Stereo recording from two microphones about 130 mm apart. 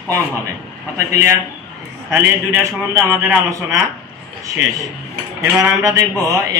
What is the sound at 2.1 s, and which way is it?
A man's voice, 15° right (ahead or behind).